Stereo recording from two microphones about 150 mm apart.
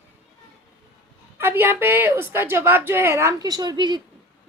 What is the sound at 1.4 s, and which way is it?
A woman's voice, 15° right (ahead or behind).